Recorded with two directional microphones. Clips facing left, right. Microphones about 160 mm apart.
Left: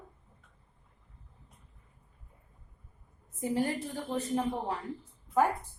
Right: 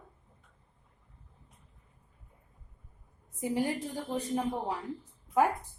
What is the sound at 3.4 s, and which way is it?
A woman's voice, 15° right (ahead or behind).